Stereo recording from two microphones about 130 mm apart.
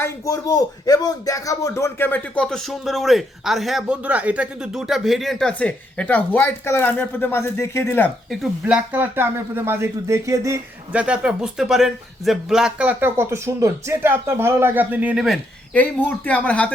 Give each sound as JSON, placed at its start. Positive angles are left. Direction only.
{"t": 0.0, "sound": "speech", "side_deg": 25}
{"t": 8.3, "sound": "a man's voice", "side_deg": -10}
{"t": 10.9, "sound": "a man's voice", "side_deg": -10}
{"t": 15.7, "sound": "speech", "side_deg": 15}